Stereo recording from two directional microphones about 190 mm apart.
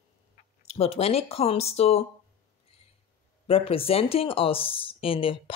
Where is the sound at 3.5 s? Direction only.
30° left (ahead or behind).